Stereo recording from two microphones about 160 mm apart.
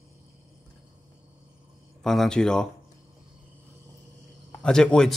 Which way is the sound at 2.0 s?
5° left (ahead or behind).